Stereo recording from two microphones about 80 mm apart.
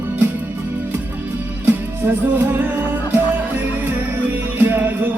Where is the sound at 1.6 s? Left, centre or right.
Right.